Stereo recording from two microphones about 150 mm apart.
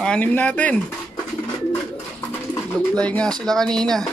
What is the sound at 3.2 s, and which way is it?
Speech, 25° right (ahead or behind).